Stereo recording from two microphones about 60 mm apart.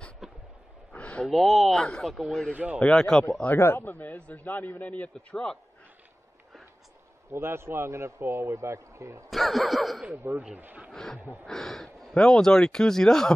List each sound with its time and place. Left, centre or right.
0.2 s a sound: centre
0.9 s a sound: centre
1.3 s speech: centre
2.5 s speech: right
2.8 s speech: centre
3.5 s a man's voice: left
5.1 s speech: centre
7.3 s speech: right
9.3 s speech: centre
10.1 s speech: right
10.6 s speech: right
10.9 s speech: centre